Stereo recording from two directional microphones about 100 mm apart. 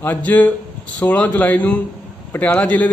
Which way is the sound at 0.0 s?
20° left (ahead or behind).